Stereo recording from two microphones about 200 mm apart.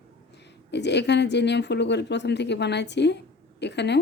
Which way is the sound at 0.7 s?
60° left (ahead or behind).